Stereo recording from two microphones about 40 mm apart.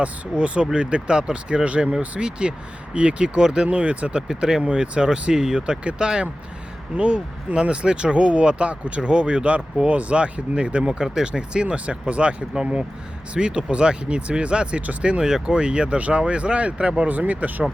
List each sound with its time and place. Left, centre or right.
0.0 s speech: right
4.3 s speech: centre
17.0 s speech: right